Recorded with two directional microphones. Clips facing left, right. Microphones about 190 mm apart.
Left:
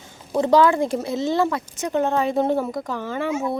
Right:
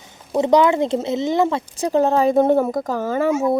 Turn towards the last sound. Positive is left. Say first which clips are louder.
# right 6 dB
turn(degrees=-45)  # may be behind; listen again after turning